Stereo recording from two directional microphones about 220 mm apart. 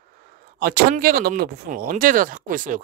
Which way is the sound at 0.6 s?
45° right (ahead or behind).